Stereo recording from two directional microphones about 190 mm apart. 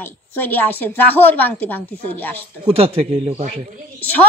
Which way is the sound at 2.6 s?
30° right (ahead or behind).